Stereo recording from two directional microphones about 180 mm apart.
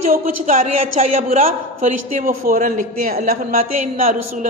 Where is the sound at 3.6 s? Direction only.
35° right (ahead or behind).